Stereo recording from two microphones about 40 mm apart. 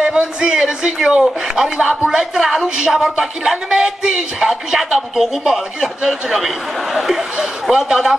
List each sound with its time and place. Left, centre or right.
0.0 s speech: centre
2.3 s speech: centre
4.5 s speech: centre